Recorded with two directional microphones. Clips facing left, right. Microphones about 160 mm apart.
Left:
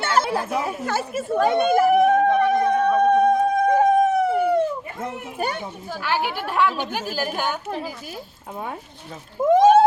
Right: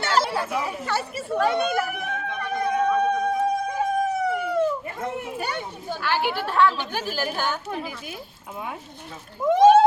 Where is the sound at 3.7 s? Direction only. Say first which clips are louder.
Left 7 dB; 55° left (ahead or behind).